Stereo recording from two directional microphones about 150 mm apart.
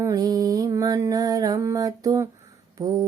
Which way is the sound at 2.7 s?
25° right (ahead or behind).